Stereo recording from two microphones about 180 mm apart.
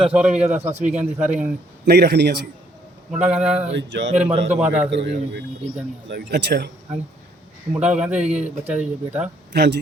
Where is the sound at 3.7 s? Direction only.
85° right.